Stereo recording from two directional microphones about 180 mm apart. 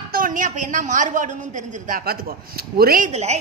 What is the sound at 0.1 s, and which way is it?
A woman's voice, 50° right (ahead or behind).